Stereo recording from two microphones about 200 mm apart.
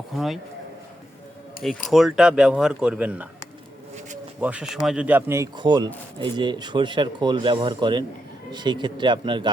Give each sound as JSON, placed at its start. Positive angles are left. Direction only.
{"t": 0.1, "sound": "speech", "side_deg": 0}
{"t": 1.9, "sound": "speech", "side_deg": 0}
{"t": 4.4, "sound": "speech", "side_deg": -5}